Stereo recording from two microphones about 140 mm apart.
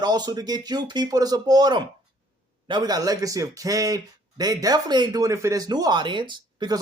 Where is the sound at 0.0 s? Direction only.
30° right (ahead or behind).